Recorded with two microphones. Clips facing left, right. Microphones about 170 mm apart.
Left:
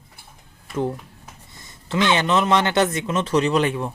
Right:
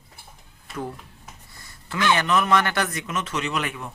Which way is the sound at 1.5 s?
20° left (ahead or behind).